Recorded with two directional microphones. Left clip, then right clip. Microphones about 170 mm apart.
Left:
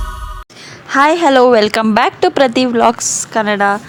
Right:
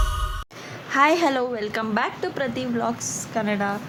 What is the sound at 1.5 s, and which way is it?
A woman's voice, 80° left.